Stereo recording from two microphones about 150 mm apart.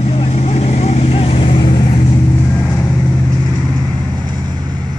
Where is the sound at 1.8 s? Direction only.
45° left (ahead or behind).